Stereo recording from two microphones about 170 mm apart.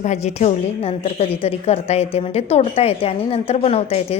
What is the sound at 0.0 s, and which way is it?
A woman's voice, 40° left (ahead or behind).